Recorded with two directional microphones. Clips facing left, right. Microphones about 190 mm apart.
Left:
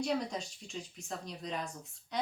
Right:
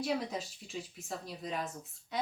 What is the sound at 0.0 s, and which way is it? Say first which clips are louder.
Speech: even; 5° right (ahead or behind).